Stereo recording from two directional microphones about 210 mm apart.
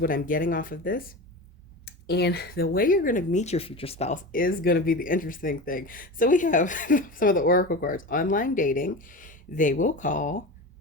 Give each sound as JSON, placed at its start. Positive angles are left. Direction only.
{"t": 0.0, "sound": "speech", "side_deg": 40}